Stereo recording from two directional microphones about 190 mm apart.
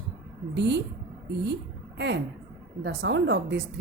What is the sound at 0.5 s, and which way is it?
Speech, 65° right (ahead or behind).